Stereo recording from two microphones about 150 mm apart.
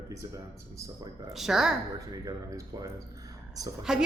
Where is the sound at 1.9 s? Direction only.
20° right (ahead or behind).